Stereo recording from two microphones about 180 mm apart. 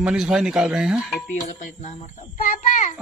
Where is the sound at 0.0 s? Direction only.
5° right (ahead or behind).